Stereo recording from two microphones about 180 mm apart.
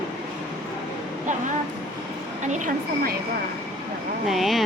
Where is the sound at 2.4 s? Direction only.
40° right (ahead or behind).